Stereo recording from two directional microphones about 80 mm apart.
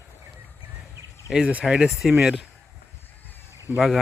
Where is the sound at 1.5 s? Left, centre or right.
Centre.